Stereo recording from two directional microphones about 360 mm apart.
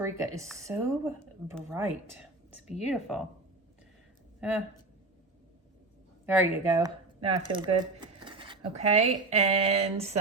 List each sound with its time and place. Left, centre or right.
0.0 s speech: centre
4.4 s speech: centre
6.2 s speech: centre